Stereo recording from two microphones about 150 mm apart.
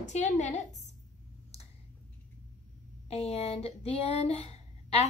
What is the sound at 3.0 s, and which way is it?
A woman's voice, 45° left (ahead or behind).